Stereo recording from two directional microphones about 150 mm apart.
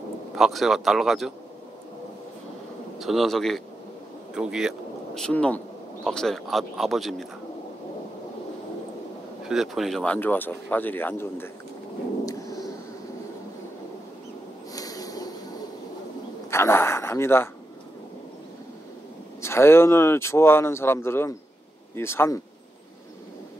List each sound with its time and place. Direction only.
0.4 s speech: centre (ahead or behind)
3.0 s speech: centre (ahead or behind)
9.5 s speech: centre (ahead or behind); by 11.5 s 15° left (ahead or behind)
12.3 s a sound: 20° left (ahead or behind)
14.7 s snort: 25° left (ahead or behind)
16.4 s a sound: 15° left (ahead or behind)
19.4 s speech: 15° left (ahead or behind)